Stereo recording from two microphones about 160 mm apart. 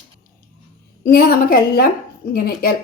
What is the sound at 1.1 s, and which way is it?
A woman's voice, 70° left (ahead or behind).